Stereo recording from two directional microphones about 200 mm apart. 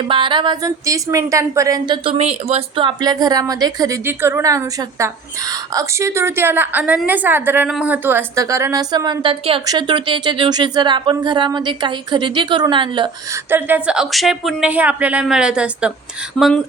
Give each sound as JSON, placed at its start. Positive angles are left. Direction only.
{"t": 0.1, "sound": "a woman's voice", "side_deg": -25}
{"t": 13.5, "sound": "speech", "side_deg": -10}
{"t": 16.4, "sound": "a woman's voice", "side_deg": -25}